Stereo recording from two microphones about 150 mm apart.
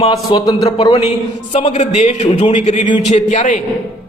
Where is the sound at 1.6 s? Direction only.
50° left (ahead or behind).